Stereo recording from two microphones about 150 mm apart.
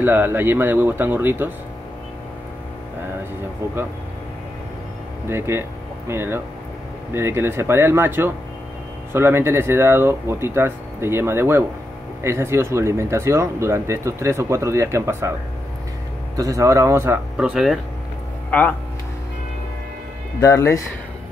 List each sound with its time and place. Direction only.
0.0 s speech: 15° right (ahead or behind)
5.3 s speech: 15° right (ahead or behind)
16.3 s speech: 20° right (ahead or behind)
17.4 s speech: 5° right (ahead or behind)
18.5 s speech: 10° left (ahead or behind)
20.3 s speech: 20° left (ahead or behind)